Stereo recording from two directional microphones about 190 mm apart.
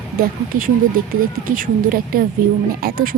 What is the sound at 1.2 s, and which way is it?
A woman's voice, 50° right (ahead or behind).